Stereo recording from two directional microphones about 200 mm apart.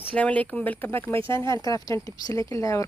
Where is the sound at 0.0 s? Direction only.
5° left (ahead or behind).